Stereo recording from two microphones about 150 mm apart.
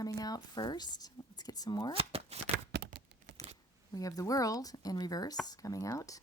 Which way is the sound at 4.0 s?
25° left (ahead or behind).